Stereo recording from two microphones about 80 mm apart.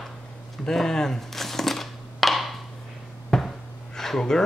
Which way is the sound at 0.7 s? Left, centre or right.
Centre.